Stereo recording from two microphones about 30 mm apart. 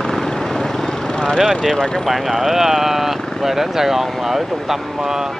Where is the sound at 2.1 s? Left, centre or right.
Centre.